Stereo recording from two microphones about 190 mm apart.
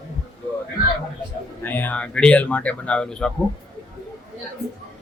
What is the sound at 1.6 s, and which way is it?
Speech, 10° left (ahead or behind).